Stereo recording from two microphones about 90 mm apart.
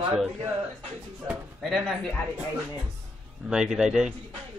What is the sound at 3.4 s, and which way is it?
Speech, 10° right (ahead or behind).